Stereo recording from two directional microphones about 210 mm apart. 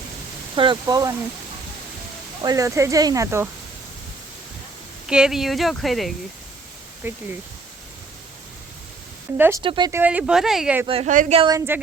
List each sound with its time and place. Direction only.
0.5 s speech: 25° right (ahead or behind)
2.4 s speech: 15° right (ahead or behind)
5.0 s speech: 5° right (ahead or behind)
7.0 s speech: 10° right (ahead or behind)
9.6 s speech: 20° right (ahead or behind)
10.0 s speech: 5° right (ahead or behind)
10.8 s a woman's voice: 30° right (ahead or behind)
11.3 s speech: 20° right (ahead or behind)